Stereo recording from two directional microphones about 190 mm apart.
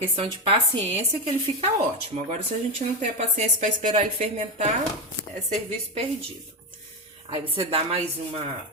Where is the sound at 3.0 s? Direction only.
40° right (ahead or behind).